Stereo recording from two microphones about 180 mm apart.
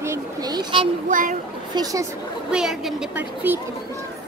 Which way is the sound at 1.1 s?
45° right (ahead or behind).